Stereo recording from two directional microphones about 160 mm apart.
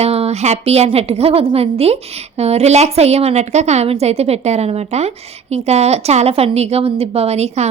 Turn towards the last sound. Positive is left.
turn(degrees=-40)  # may be behind; listen again after turning